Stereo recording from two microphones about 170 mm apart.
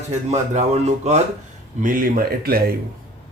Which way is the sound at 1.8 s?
55° right (ahead or behind).